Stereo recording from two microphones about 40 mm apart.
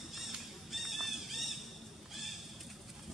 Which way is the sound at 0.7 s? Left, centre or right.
Centre.